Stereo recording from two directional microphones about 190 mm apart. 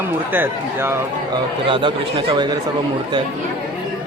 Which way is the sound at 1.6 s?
25° right (ahead or behind).